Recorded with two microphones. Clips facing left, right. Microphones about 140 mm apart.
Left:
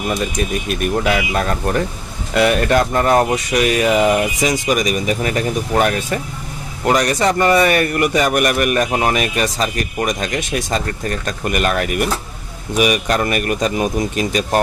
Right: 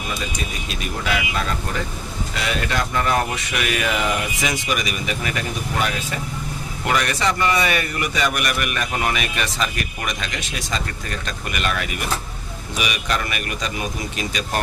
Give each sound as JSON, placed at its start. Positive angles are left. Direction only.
{"t": 0.7, "sound": "a man's voice", "side_deg": 50}